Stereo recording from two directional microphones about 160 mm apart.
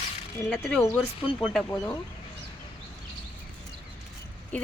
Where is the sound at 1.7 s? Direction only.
15° left (ahead or behind).